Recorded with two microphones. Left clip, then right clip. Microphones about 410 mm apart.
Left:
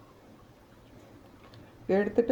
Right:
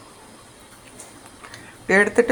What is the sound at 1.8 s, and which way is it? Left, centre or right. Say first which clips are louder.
Speech: right 10 dB; left.